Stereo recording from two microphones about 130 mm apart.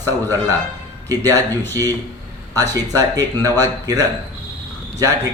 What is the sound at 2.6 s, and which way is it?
Speech, 25° right (ahead or behind).